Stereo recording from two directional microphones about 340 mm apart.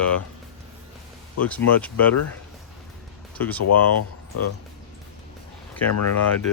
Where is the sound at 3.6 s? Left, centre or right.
Left.